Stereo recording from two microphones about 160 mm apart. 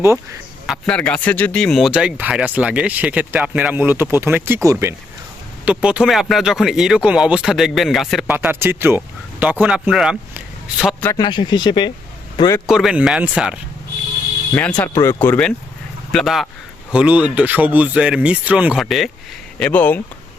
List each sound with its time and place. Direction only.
0.7 s speech: 5° left (ahead or behind); by 4.9 s 20° right (ahead or behind)
5.6 s speech: 5° right (ahead or behind)
8.4 s speech: 15° right (ahead or behind)
11.2 s speech: 30° left (ahead or behind)
12.6 s speech: 5° right (ahead or behind)
14.5 s speech: 10° left (ahead or behind)